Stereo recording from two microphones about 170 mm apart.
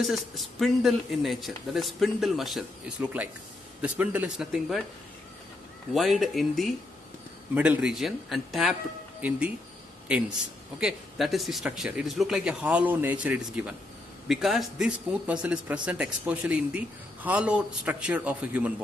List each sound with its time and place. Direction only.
0.0 s a man's voice: centre (ahead or behind)
5.9 s speech: centre (ahead or behind)
10.1 s a man's voice: 5° right (ahead or behind)